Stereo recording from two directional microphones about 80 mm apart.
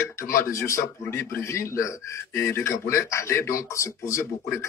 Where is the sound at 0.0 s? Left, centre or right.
Left.